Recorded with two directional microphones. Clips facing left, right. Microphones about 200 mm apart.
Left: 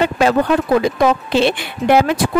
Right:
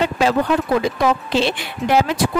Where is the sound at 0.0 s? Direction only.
55° left (ahead or behind).